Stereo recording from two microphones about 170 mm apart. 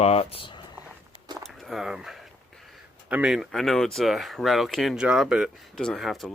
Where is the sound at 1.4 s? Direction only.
Centre (ahead or behind).